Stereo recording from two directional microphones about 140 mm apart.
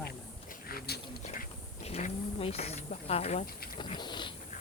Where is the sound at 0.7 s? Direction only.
90° left.